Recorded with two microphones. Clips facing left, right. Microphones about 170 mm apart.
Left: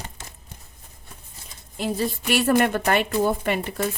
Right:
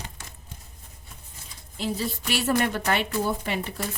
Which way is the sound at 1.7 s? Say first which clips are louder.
Left 4 dB; 55° left (ahead or behind).